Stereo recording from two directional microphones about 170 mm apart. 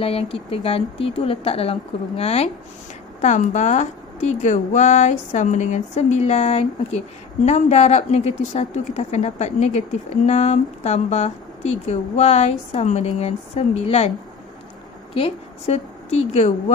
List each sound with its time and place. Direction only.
0.0 s a woman's voice: 35° left (ahead or behind)
15.1 s a woman's voice: 35° left (ahead or behind)